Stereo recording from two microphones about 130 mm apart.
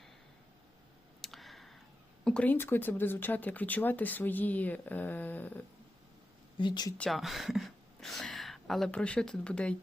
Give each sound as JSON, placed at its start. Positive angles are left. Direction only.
{"t": 1.2, "sound": "a sound", "side_deg": 0}
{"t": 2.2, "sound": "speech", "side_deg": 10}
{"t": 6.6, "sound": "speech", "side_deg": 35}
{"t": 7.0, "sound": "speech", "side_deg": 0}